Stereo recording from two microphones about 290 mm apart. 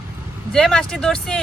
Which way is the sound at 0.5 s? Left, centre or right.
Centre.